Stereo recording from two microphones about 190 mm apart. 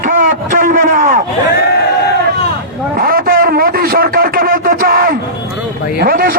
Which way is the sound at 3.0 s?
50° right (ahead or behind).